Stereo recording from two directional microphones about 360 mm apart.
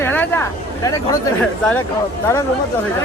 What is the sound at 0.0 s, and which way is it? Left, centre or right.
Speech, centre.